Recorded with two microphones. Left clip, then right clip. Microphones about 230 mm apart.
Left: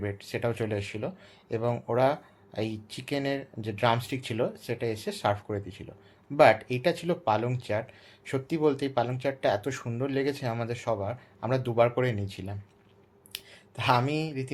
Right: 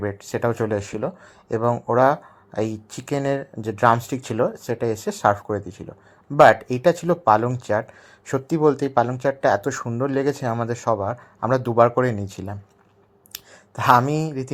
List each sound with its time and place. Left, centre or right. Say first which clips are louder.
0.0 s speech: right 8 dB; right